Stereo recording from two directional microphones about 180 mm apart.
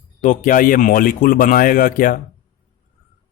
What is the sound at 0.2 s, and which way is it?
Speech, 45° left (ahead or behind).